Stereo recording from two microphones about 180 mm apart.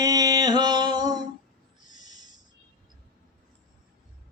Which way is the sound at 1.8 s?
20° right (ahead or behind).